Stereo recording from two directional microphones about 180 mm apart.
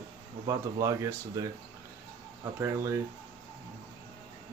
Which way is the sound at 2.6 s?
15° right (ahead or behind).